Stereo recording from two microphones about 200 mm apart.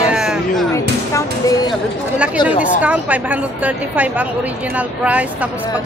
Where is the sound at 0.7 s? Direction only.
15° left (ahead or behind).